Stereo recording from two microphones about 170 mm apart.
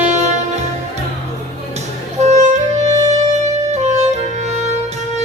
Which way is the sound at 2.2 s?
40° right (ahead or behind).